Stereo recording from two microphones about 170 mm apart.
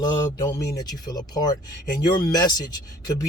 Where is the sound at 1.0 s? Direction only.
25° left (ahead or behind).